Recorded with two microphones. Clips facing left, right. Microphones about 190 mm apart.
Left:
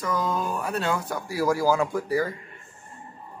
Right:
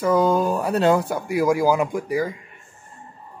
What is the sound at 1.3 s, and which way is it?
Speech, 15° right (ahead or behind).